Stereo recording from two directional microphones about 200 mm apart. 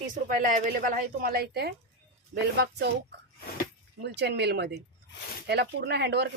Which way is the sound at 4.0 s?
55° right (ahead or behind).